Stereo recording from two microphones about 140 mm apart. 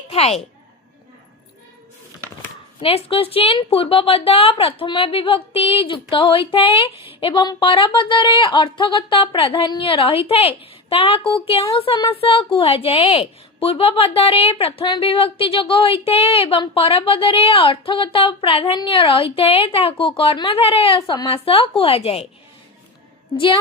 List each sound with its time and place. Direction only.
0.1 s a woman's voice: 50° left (ahead or behind)
2.8 s a woman's voice: 40° left (ahead or behind)